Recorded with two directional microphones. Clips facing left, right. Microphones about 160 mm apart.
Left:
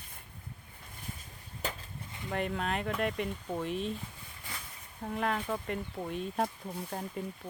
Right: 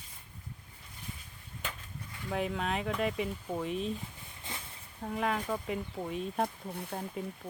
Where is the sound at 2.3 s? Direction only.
Centre (ahead or behind).